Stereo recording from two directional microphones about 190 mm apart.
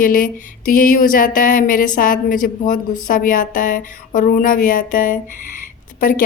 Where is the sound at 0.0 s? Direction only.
45° left (ahead or behind).